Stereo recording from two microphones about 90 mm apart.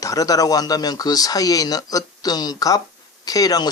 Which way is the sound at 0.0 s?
40° left (ahead or behind).